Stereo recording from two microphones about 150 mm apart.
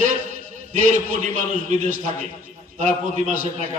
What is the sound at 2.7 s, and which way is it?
Speech, 55° right (ahead or behind).